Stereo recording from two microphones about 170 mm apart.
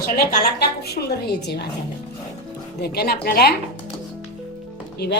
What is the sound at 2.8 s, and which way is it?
Speech, 65° left (ahead or behind).